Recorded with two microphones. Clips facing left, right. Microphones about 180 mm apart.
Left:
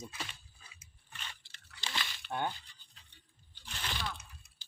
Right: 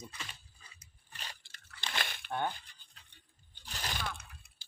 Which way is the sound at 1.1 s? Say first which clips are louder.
Right 1 dB; 40° right (ahead or behind).